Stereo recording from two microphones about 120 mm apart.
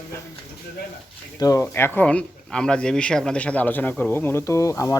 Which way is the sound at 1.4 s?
30° left (ahead or behind).